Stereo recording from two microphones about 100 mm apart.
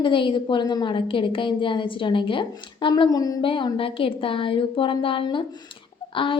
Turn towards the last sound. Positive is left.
turn(degrees=60)  # may be behind; listen again after turning